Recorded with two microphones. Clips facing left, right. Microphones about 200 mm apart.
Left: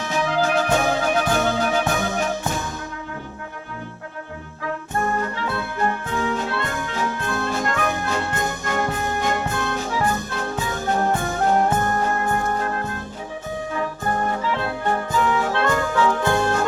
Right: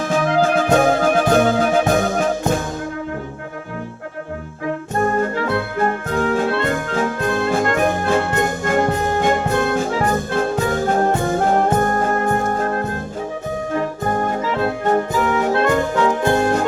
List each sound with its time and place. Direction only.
0.0 s music: 50° right (ahead or behind)
5.0 s music: 50° right (ahead or behind)
15.6 s music: 25° right (ahead or behind)